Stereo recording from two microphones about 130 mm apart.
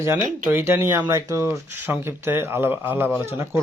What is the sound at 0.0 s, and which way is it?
Speech, 20° right (ahead or behind).